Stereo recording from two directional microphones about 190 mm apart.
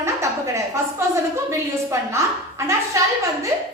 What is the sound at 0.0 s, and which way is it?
A woman's voice, 15° right (ahead or behind).